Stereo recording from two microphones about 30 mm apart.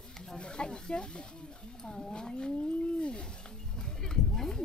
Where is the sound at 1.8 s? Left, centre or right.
Left.